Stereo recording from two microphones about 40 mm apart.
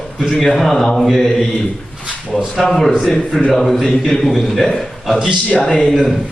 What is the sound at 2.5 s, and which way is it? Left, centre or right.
A man's voice, centre.